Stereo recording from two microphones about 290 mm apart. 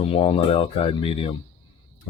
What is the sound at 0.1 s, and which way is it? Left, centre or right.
Speech, left.